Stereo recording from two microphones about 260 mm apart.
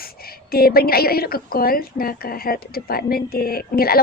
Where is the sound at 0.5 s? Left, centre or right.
Left.